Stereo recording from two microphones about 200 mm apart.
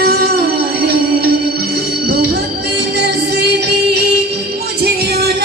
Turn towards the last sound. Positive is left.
turn(degrees=-50)  # may be behind; listen again after turning